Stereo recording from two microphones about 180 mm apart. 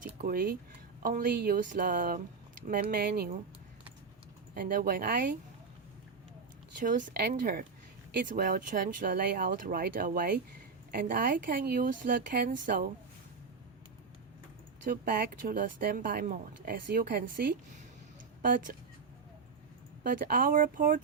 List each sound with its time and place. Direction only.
0.0 s speech: 50° right (ahead or behind)
2.9 s speech: 60° right (ahead or behind)
4.5 s speech: 50° right (ahead or behind)
6.7 s speech: 50° right (ahead or behind)
14.8 s speech: 55° right (ahead or behind)
20.1 s speech: 50° right (ahead or behind)